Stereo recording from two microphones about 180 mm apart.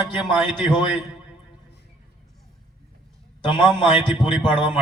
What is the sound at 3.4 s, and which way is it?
A man's voice, 25° left (ahead or behind).